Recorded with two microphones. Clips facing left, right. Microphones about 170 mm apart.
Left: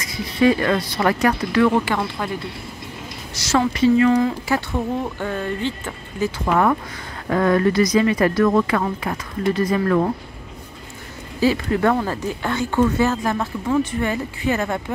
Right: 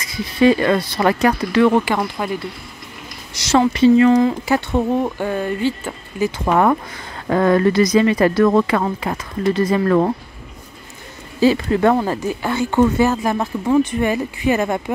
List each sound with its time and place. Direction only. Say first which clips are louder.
0.4 s speech: right 3 dB; 25° right (ahead or behind)
3.3 s speech: right 4 dB; 20° right (ahead or behind)
6.4 s speech: right 3 dB; 30° right (ahead or behind)
11.4 s speech: right 4 dB; 25° right (ahead or behind)
12.4 s speech: right 3 dB; 10° right (ahead or behind)